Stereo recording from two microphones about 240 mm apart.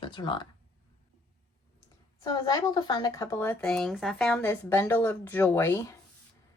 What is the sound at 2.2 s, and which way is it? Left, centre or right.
A woman's voice, centre.